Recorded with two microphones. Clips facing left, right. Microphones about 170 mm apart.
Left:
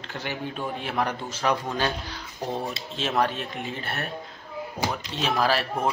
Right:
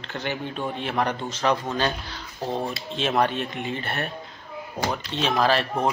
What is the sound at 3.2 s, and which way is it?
Speech, centre (ahead or behind).